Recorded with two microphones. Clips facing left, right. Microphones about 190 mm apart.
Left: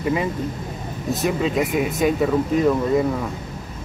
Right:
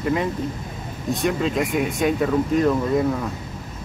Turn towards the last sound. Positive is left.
turn(degrees=0)  # may be behind; listen again after turning